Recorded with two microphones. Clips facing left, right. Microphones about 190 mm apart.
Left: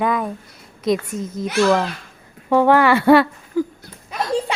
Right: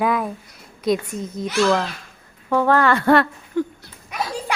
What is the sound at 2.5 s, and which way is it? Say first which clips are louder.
Speech: left 3 dB; 15° left (ahead or behind).